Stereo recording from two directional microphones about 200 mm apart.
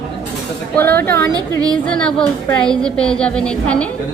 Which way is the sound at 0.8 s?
10° left (ahead or behind).